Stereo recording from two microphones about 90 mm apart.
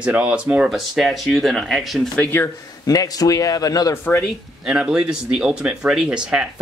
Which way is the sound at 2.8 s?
40° left (ahead or behind).